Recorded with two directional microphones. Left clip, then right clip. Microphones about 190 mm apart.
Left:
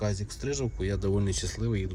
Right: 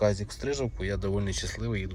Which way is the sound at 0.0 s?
15° left (ahead or behind).